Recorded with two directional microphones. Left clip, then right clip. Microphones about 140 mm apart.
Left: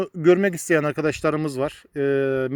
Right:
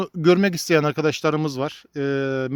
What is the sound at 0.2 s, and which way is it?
Speech, 85° right.